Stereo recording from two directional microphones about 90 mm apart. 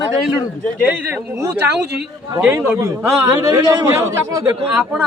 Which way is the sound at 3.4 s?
40° right (ahead or behind).